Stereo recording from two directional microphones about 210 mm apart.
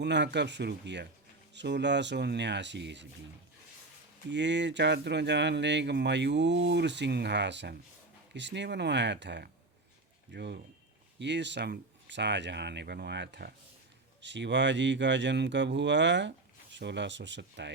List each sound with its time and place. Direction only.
0.0 s speech: 55° right (ahead or behind)
4.3 s speech: 55° right (ahead or behind)